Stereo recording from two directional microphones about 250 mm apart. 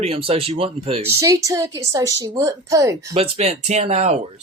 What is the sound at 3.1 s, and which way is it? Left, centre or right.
Speech, right.